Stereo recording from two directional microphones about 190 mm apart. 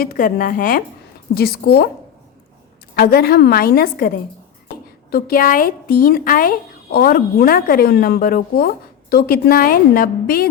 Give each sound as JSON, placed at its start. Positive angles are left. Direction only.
{"t": 0.0, "sound": "a woman's voice", "side_deg": 50}
{"t": 2.9, "sound": "a woman's voice", "side_deg": 55}
{"t": 5.1, "sound": "speech", "side_deg": 50}